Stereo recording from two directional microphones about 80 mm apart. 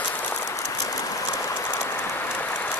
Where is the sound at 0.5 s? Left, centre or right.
Left.